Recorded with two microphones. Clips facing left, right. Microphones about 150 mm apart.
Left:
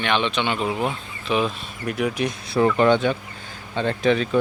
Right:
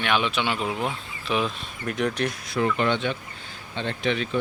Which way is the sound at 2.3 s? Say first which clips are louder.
Left 5 dB; 30° left (ahead or behind).